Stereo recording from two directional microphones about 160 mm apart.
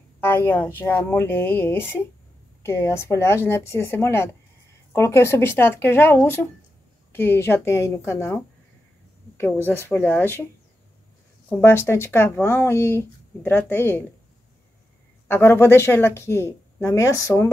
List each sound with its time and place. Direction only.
0.2 s speech: 15° left (ahead or behind)
9.7 s speech: 10° left (ahead or behind)
11.4 s speech: 10° left (ahead or behind)
15.2 s speech: 15° left (ahead or behind)